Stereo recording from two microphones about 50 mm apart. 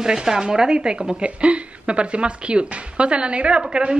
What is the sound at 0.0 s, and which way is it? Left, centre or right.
Speech, centre.